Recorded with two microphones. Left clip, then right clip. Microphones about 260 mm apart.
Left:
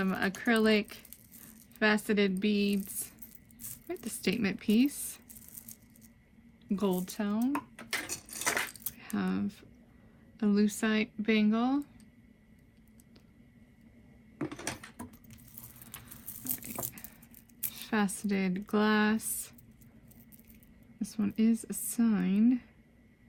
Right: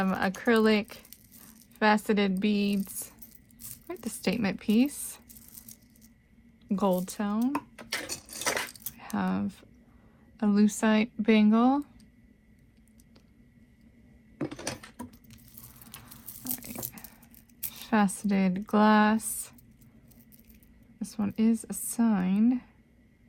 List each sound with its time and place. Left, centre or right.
0.0 s speech: centre
6.7 s speech: centre
7.8 s keys jangling: centre
9.0 s speech: centre
14.3 s a sound: centre
17.7 s a sound: centre
18.3 s speech: centre
21.1 s speech: centre